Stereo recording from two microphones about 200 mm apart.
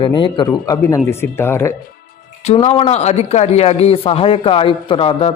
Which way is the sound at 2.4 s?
35° left (ahead or behind).